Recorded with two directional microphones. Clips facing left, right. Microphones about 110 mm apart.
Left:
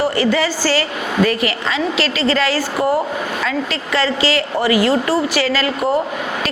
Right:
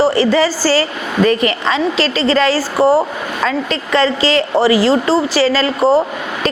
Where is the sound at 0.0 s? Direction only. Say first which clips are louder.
Right 4 dB; 35° right (ahead or behind).